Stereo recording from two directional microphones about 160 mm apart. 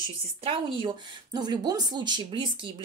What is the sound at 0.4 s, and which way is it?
A woman's voice, 30° right (ahead or behind).